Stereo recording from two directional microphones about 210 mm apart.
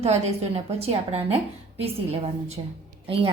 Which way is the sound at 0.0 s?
30° right (ahead or behind).